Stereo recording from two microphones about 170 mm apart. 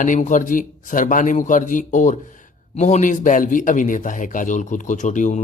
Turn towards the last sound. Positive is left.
turn(degrees=45)  # may be behind; listen again after turning